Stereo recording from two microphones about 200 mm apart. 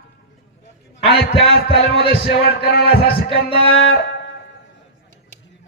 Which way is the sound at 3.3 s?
30° left (ahead or behind).